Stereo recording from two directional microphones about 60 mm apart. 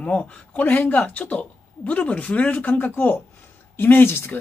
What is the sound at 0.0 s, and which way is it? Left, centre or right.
Speech, centre.